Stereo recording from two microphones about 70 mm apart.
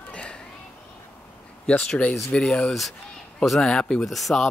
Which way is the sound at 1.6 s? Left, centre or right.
Centre.